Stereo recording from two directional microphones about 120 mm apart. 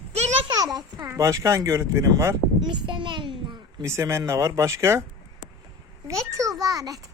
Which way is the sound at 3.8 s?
25° right (ahead or behind).